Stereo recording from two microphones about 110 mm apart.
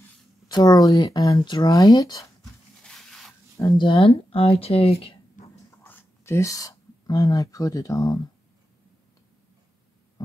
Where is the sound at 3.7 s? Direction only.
55° left (ahead or behind).